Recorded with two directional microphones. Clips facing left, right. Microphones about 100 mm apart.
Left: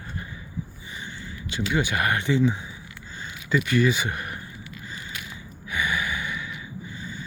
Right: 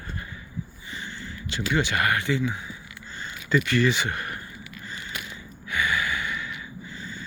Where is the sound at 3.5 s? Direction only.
10° left (ahead or behind).